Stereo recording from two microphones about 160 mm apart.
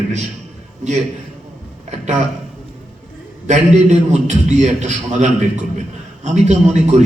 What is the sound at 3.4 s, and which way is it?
A man's voice, 45° right (ahead or behind).